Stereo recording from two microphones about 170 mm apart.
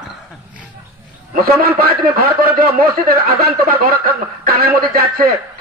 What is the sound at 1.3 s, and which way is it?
A man's voice, 60° right (ahead or behind).